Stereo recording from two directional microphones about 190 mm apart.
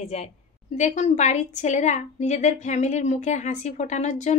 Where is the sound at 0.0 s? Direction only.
35° left (ahead or behind).